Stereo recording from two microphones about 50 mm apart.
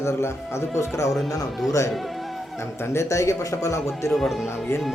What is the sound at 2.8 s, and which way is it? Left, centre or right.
A man's voice, left.